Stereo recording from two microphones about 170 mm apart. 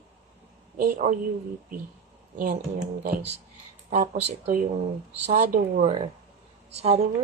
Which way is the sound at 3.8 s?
40° right (ahead or behind).